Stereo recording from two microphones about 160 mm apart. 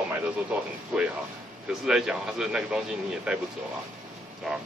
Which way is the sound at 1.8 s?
5° right (ahead or behind).